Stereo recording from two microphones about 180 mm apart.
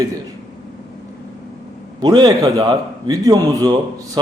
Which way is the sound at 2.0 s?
25° right (ahead or behind).